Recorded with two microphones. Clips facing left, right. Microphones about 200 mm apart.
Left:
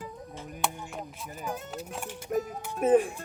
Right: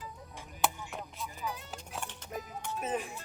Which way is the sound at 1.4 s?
50° left (ahead or behind).